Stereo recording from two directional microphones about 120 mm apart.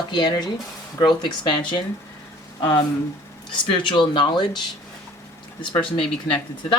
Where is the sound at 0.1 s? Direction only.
35° left (ahead or behind).